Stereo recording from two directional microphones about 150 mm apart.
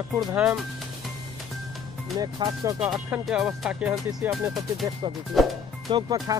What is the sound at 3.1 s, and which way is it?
Speech, 5° right (ahead or behind).